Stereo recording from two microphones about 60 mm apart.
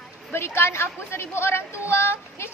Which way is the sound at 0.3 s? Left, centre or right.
Left.